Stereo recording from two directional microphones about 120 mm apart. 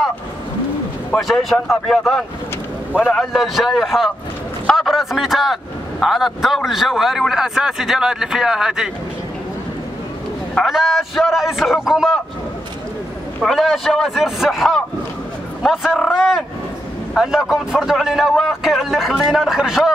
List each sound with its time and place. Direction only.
1.1 s speech: centre (ahead or behind)
10.5 s speech: centre (ahead or behind)
13.4 s speech: centre (ahead or behind)